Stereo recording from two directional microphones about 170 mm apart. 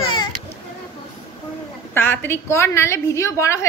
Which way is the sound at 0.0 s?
30° left (ahead or behind).